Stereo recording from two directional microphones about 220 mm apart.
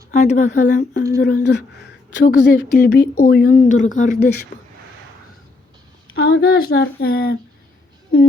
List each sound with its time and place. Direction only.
0.1 s speech: 35° left (ahead or behind)
1.2 s speech: 50° left (ahead or behind)
6.1 s speech: 60° left (ahead or behind)
6.7 s speech: 45° left (ahead or behind)